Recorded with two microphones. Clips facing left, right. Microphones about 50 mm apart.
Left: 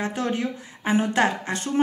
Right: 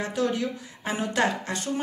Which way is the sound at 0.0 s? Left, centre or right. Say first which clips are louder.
Left 1 dB; left.